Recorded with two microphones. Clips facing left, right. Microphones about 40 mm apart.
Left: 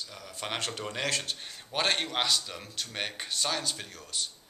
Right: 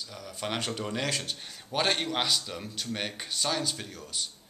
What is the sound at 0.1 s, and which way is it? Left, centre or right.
Speech, centre.